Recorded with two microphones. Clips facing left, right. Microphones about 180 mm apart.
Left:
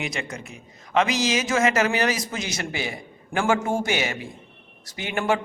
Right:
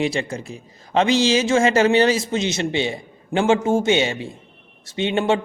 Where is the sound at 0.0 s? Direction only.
30° right (ahead or behind).